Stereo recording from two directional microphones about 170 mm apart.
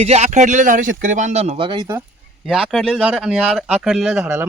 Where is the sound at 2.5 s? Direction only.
Centre (ahead or behind).